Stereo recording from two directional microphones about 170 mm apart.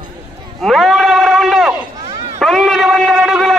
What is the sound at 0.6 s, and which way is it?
Sheep, centre (ahead or behind).